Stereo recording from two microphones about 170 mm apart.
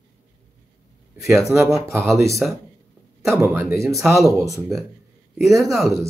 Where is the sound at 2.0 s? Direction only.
Centre (ahead or behind).